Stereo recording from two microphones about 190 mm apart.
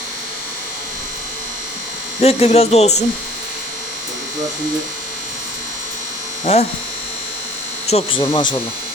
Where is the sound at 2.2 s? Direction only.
30° left (ahead or behind).